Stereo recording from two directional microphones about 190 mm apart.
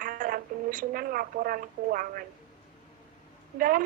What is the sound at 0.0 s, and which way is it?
Speech, 45° right (ahead or behind).